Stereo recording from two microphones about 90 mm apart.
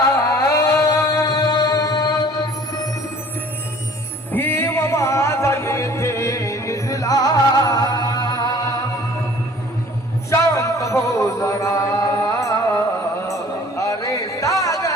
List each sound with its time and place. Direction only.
0.3 s music: 35° left (ahead or behind)
4.3 s music: 25° left (ahead or behind); by 8.8 s 45° left (ahead or behind)
10.2 s music: 35° left (ahead or behind)
13.2 s a sound: 35° left (ahead or behind)